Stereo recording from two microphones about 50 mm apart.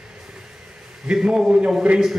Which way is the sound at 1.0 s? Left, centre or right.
Centre.